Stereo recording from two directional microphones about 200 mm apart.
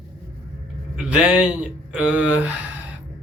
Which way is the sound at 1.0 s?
5° right (ahead or behind).